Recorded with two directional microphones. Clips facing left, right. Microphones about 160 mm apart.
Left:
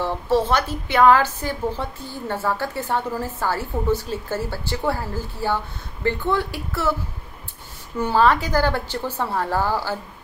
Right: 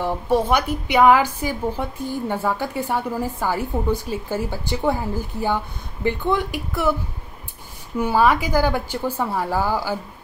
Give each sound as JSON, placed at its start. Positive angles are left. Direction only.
{"t": 0.0, "sound": "a woman's voice", "side_deg": -15}
{"t": 8.0, "sound": "a woman's voice", "side_deg": -10}